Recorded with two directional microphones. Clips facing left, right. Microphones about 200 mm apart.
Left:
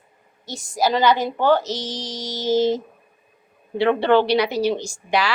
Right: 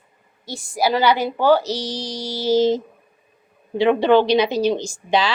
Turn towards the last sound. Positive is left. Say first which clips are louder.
# right 2 dB
turn(degrees=-20)  # may be behind; listen again after turning